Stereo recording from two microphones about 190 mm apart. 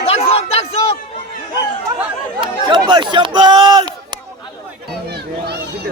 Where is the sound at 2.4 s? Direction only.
25° right (ahead or behind).